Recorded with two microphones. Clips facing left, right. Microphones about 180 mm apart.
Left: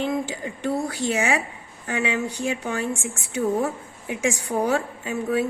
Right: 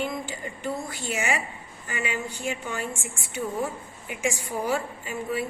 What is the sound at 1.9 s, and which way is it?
A woman's voice, 85° left.